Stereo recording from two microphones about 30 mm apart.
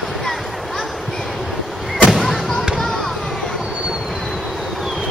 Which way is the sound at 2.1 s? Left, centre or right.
Centre.